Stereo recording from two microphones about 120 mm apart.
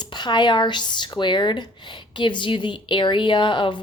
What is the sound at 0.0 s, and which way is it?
A woman's voice, 35° left (ahead or behind).